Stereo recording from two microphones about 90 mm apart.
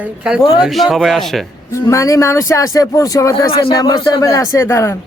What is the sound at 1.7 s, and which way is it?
Speech, 35° left (ahead or behind).